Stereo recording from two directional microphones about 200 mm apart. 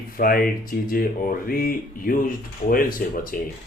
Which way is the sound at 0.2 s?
45° left (ahead or behind).